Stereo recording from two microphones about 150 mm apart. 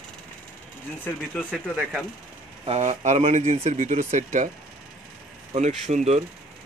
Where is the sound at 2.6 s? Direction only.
50° right (ahead or behind).